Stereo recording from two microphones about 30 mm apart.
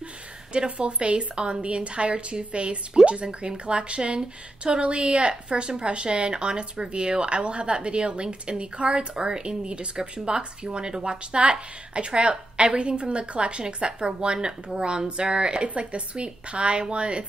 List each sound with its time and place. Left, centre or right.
0.7 s a woman's voice: right
15.7 s speech: right